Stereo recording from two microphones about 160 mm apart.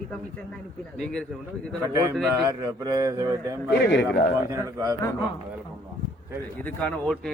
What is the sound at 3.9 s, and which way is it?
Speech, 90° left.